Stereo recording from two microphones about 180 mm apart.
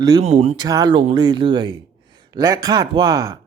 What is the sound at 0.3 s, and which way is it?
Speech, 35° right (ahead or behind).